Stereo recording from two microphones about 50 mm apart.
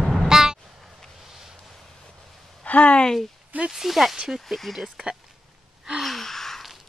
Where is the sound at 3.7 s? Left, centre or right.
Centre.